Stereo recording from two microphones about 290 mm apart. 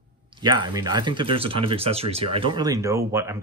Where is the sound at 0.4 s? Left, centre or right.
Centre.